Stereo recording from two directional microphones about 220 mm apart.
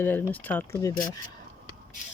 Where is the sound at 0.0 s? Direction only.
10° left (ahead or behind).